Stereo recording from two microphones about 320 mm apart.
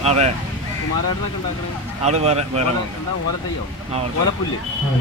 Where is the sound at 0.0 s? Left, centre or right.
Centre.